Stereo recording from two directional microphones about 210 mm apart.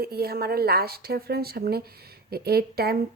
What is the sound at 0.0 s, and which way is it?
A woman's voice, 50° right (ahead or behind).